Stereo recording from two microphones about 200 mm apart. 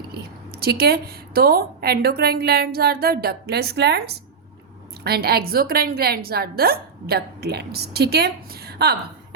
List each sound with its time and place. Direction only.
0.1 s a woman's voice: 50° right (ahead or behind)